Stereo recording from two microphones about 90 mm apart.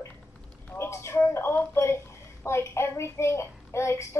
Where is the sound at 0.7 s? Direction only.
35° left (ahead or behind).